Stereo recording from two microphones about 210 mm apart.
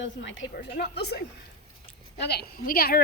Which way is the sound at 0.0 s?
60° left (ahead or behind).